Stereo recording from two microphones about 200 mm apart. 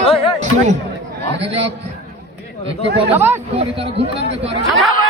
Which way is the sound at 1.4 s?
30° right (ahead or behind).